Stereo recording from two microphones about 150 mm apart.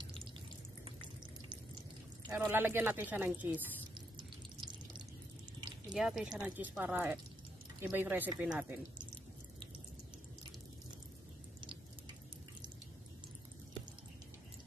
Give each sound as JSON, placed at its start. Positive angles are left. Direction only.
{"t": 0.8, "sound": "water", "side_deg": -35}
{"t": 2.2, "sound": "a woman's voice", "side_deg": -10}
{"t": 3.9, "sound": "drip", "side_deg": -30}
{"t": 5.9, "sound": "a woman's voice", "side_deg": 0}